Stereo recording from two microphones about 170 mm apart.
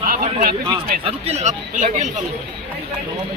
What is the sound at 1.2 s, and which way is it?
Speech, 40° right (ahead or behind).